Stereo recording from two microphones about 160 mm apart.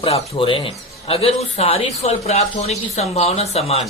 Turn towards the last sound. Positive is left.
turn(degrees=40)  # may be behind; listen again after turning